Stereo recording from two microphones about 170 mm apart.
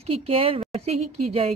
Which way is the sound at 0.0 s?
35° right (ahead or behind).